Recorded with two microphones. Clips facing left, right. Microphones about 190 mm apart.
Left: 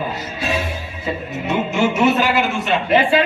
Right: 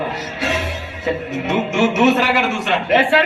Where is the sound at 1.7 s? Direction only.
80° right.